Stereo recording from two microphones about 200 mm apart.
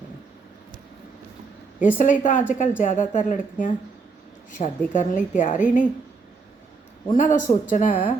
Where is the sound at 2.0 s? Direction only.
40° left (ahead or behind).